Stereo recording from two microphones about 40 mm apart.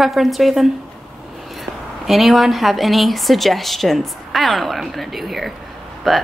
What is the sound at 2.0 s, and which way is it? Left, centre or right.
Speech, centre.